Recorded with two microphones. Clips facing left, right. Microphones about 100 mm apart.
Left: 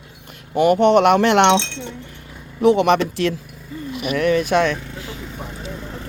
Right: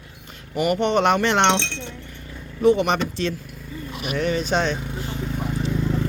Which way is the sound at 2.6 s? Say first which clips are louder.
Left 3 dB; 75° left (ahead or behind).